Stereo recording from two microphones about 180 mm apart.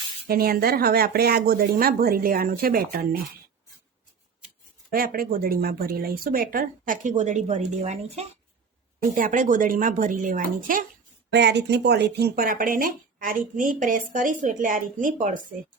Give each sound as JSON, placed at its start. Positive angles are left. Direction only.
{"t": 0.3, "sound": "speech", "side_deg": -55}
{"t": 4.9, "sound": "speech", "side_deg": -55}
{"t": 9.1, "sound": "speech", "side_deg": -50}
{"t": 11.3, "sound": "speech", "side_deg": -70}